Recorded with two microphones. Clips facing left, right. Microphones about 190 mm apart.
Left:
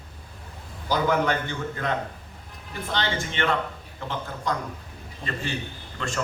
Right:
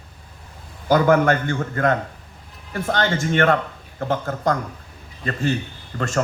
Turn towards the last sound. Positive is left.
turn(degrees=-45)  # may be behind; listen again after turning